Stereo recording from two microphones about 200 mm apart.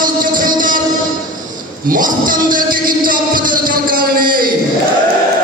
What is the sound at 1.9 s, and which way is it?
Music, 45° right (ahead or behind).